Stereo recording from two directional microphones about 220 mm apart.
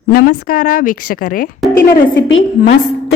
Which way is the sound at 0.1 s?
40° left (ahead or behind).